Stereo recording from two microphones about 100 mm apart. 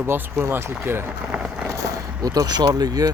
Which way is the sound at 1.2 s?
10° right (ahead or behind).